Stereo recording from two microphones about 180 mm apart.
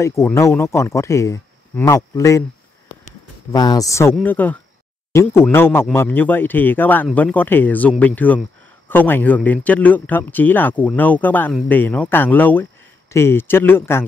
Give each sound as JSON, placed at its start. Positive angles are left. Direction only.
{"t": 0.0, "sound": "a man's voice", "side_deg": 15}
{"t": 3.5, "sound": "a man's voice", "side_deg": 20}